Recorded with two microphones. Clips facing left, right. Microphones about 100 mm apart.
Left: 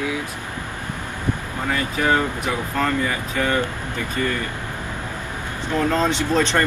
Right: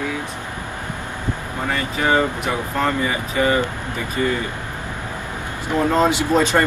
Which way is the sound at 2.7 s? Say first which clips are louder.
Right 1 dB; 10° right (ahead or behind).